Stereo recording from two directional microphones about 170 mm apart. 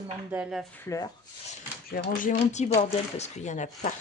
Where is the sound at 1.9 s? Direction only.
50° left (ahead or behind).